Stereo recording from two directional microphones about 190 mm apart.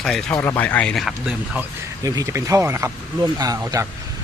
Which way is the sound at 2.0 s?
20° right (ahead or behind).